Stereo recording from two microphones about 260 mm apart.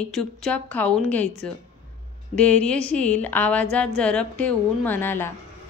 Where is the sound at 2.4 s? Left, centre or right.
Centre.